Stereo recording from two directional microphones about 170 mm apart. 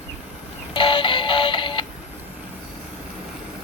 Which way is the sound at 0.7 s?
30° left (ahead or behind).